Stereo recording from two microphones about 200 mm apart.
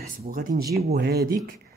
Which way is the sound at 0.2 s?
45° right (ahead or behind).